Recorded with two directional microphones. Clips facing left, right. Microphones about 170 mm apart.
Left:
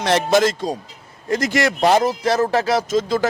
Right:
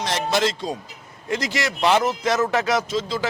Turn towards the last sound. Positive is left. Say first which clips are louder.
# left 6 dB
turn(degrees=50)  # may be behind; listen again after turning